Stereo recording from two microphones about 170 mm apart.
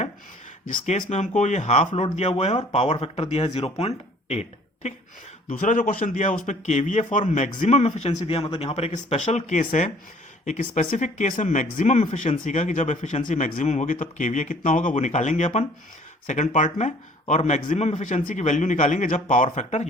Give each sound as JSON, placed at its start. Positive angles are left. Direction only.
{"t": 0.6, "sound": "a man's voice", "side_deg": 50}
{"t": 1.9, "sound": "speech", "side_deg": 25}
{"t": 2.1, "sound": "a man's voice", "side_deg": 40}